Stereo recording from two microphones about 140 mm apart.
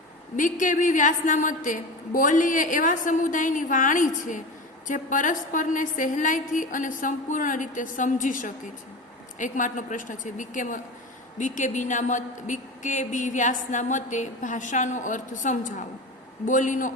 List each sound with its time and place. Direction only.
0.3 s a woman's voice: 70° left (ahead or behind)